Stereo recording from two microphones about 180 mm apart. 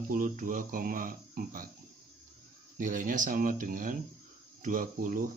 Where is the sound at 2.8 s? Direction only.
50° right (ahead or behind).